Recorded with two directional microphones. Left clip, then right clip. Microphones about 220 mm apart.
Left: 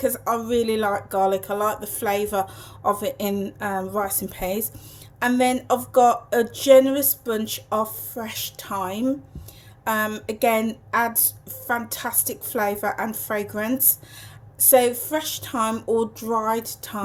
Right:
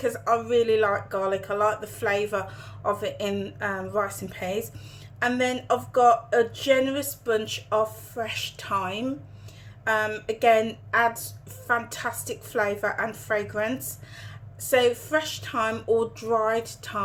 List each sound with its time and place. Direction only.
0.0 s speech: 35° left (ahead or behind)